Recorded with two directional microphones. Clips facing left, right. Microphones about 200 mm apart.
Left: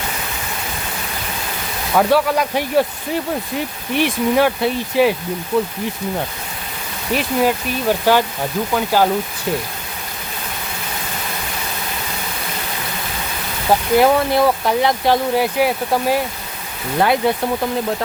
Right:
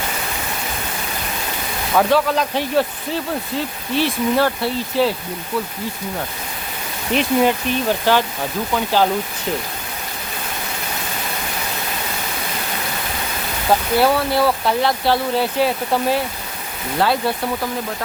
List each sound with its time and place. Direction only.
2.0 s speech: 10° left (ahead or behind)
7.1 s speech: 5° left (ahead or behind)
14.0 s speech: 15° left (ahead or behind)